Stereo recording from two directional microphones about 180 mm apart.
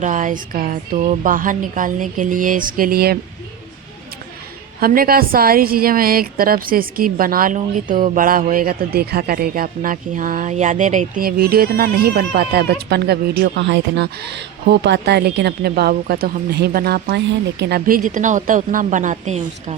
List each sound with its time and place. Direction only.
0.0 s a woman's voice: 45° right (ahead or behind)
4.8 s a woman's voice: 55° right (ahead or behind)